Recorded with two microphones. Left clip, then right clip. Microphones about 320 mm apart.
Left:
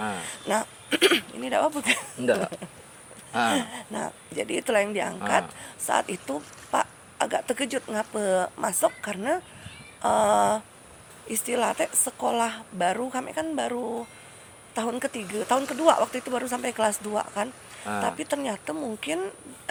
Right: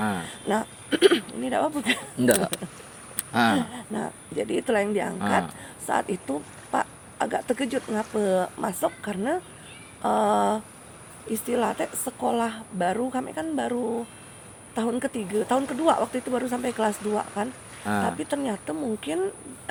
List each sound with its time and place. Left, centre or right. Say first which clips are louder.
0.4 s speech: left 1 dB; left
2.1 s speech: right 2 dB; right
3.5 s speech: right 1 dB; left
17.9 s speech: right 3 dB; right
18.2 s speech: even; left